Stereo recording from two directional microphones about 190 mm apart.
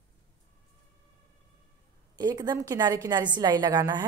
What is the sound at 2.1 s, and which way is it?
A woman's voice, 20° right (ahead or behind).